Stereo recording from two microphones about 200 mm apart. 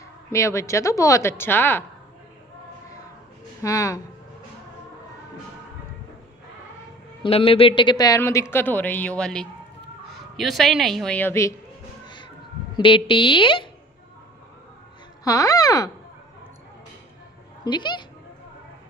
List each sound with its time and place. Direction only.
0.3 s speech: 15° left (ahead or behind)
3.6 s speech: 15° left (ahead or behind)
7.2 s a woman's voice: 30° left (ahead or behind); by 11.5 s 10° left (ahead or behind)
12.7 s speech: 25° left (ahead or behind)
15.2 s speech: 15° left (ahead or behind)
17.6 s speech: 20° left (ahead or behind)